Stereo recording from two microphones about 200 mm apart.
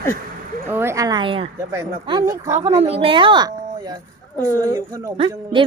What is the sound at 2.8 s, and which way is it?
A woman's voice, 30° right (ahead or behind).